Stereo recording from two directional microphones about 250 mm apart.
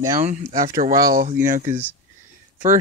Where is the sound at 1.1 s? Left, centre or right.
Right.